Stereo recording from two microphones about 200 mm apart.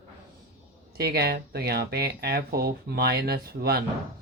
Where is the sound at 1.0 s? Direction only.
50° right (ahead or behind).